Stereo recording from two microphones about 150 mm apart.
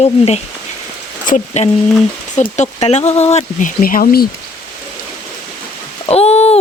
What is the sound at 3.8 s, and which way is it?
Speech, 70° left (ahead or behind).